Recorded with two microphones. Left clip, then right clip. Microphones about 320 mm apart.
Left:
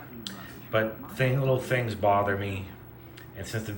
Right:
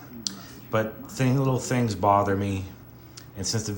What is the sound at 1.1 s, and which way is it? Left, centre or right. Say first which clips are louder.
Speech: even; centre.